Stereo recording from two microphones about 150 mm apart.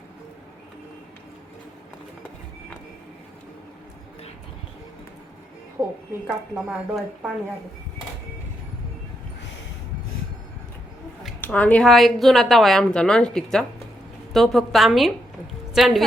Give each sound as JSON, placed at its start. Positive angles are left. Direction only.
{"t": 5.8, "sound": "speech", "side_deg": -20}
{"t": 6.2, "sound": "a woman's voice", "side_deg": -5}
{"t": 11.3, "sound": "a woman's voice", "side_deg": 10}